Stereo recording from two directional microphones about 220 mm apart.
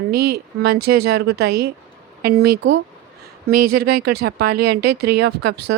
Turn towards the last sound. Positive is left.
turn(degrees=-50)  # may be behind; listen again after turning